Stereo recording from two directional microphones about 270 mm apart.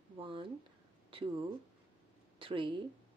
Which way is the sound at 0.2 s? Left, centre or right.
Centre.